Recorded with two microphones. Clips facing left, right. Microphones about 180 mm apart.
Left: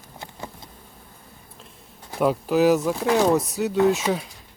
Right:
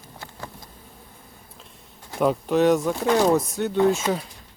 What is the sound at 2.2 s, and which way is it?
Speech, 5° left (ahead or behind).